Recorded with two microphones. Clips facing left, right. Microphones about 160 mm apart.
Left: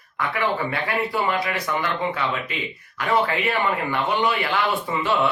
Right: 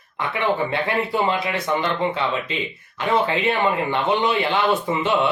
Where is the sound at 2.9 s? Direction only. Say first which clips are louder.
Right 1 dB; 25° right (ahead or behind).